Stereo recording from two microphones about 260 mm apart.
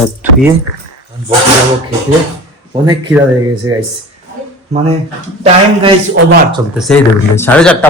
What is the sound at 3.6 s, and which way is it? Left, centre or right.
Speech, right.